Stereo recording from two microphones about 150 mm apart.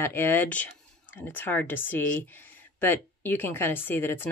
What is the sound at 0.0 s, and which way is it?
Speech, 15° left (ahead or behind).